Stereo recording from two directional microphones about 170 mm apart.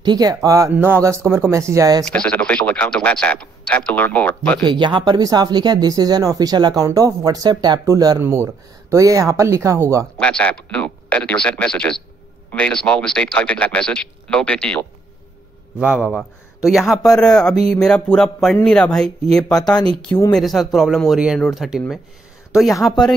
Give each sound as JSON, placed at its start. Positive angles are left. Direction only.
{"t": 0.0, "sound": "speech", "side_deg": -25}
{"t": 2.0, "sound": "speech", "side_deg": 5}
{"t": 4.6, "sound": "speech", "side_deg": -25}
{"t": 10.1, "sound": "speech", "side_deg": 5}
{"t": 15.8, "sound": "speech", "side_deg": -5}